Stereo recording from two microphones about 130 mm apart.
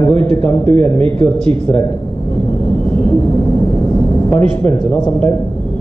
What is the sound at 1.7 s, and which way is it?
Speech, 15° left (ahead or behind).